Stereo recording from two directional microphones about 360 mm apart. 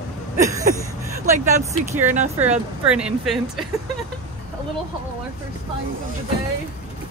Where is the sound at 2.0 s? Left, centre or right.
Centre.